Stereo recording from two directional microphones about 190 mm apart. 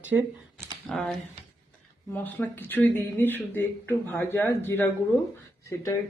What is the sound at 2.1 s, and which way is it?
Speech, 10° left (ahead or behind).